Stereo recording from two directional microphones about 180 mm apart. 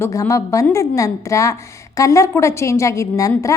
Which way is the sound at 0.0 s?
15° left (ahead or behind).